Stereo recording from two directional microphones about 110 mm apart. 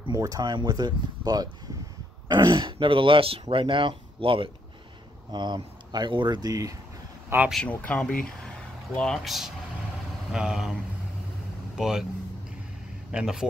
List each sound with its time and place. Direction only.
0.1 s speech: 35° right (ahead or behind); by 4.5 s 55° right (ahead or behind)
5.3 s speech: 40° right (ahead or behind)
7.3 s speech: 20° right (ahead or behind)
7.6 s speech: 15° left (ahead or behind); by 12.1 s 5° right (ahead or behind)
13.1 s speech: 5° right (ahead or behind)